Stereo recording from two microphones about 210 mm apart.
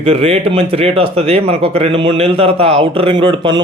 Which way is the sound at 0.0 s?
30° right (ahead or behind).